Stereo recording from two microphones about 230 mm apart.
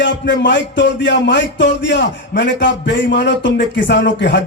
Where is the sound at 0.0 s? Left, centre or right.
Left.